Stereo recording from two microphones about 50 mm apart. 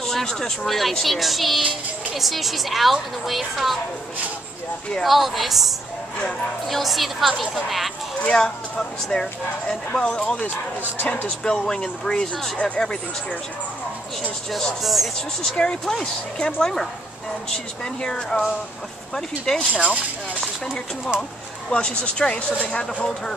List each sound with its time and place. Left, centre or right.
0.0 s speech: centre
5.0 s speech: centre
8.3 s speech: centre
12.5 s speech: left
14.8 s speech: centre
15.1 s speech: centre
19.7 s speech: left
21.2 s speech: left